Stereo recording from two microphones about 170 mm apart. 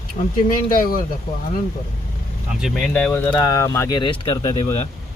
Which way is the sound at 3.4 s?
20° left (ahead or behind).